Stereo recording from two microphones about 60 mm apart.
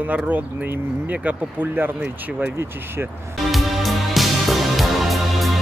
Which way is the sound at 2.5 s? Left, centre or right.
Right.